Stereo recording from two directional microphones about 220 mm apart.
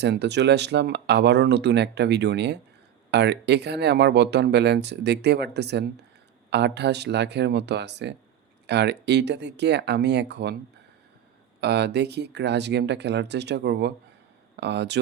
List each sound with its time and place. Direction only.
0.0 s speech: 50° right (ahead or behind)
11.6 s speech: 50° right (ahead or behind)